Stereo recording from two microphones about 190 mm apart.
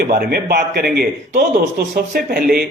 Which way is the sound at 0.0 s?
50° right (ahead or behind).